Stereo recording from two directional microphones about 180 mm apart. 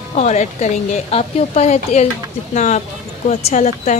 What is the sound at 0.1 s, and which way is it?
Speech, 40° left (ahead or behind).